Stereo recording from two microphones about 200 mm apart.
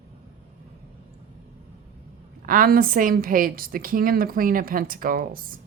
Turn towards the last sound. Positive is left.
turn(degrees=-45)  # may be behind; listen again after turning